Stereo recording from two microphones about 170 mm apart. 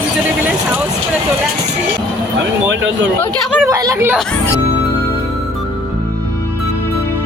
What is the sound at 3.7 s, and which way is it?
Speech, 20° right (ahead or behind).